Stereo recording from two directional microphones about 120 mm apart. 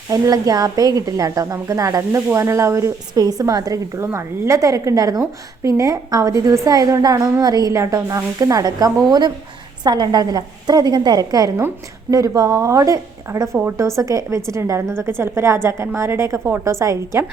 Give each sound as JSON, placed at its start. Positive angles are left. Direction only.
{"t": 0.1, "sound": "a woman's voice", "side_deg": -30}